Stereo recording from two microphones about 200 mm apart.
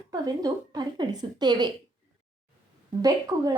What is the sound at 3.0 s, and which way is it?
Speech, 20° right (ahead or behind).